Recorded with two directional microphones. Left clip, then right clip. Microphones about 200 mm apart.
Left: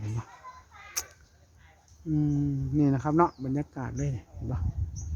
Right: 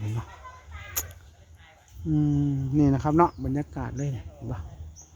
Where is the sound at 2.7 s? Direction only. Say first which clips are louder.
Right 3 dB; 20° right (ahead or behind); by 4.6 s centre (ahead or behind).